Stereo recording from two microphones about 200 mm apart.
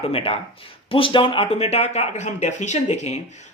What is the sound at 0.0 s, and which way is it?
Speech, 30° left (ahead or behind).